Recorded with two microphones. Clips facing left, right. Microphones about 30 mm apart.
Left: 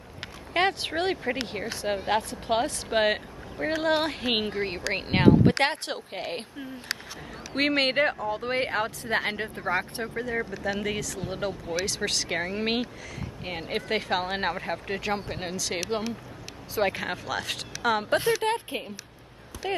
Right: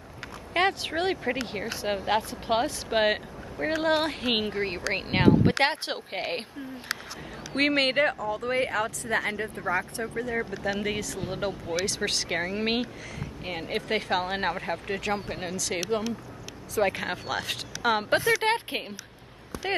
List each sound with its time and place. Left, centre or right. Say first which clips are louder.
0.5 s speech: even; centre
5.9 s a woman's voice: right 1 dB; centre
7.5 s speech: even; centre; by 8.9 s left
9.0 s speech: even; left
10.2 s speech: even; centre
16.9 s speech: even; centre
18.4 s speech: right 1 dB; right